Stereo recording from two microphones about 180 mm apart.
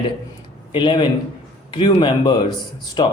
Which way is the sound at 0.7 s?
25° left (ahead or behind).